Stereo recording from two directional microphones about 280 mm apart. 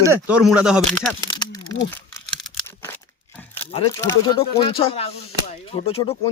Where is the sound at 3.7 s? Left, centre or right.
Centre.